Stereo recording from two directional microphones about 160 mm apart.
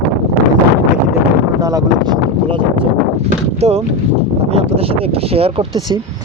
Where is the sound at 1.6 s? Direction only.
25° right (ahead or behind).